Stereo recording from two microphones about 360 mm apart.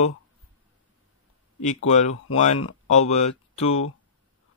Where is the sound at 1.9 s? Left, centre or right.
Centre.